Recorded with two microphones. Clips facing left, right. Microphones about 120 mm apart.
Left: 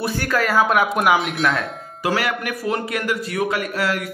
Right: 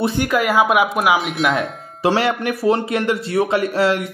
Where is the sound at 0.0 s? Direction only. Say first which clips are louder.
Right 3 dB; 20° right (ahead or behind); by 1.5 s centre (ahead or behind).